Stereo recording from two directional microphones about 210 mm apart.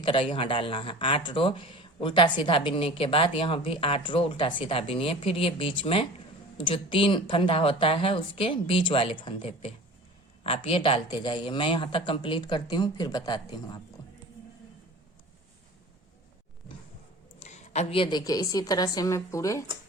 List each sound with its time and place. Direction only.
0.0 s speech: 25° left (ahead or behind)
17.4 s a woman's voice: 30° left (ahead or behind); by 19.6 s 15° left (ahead or behind)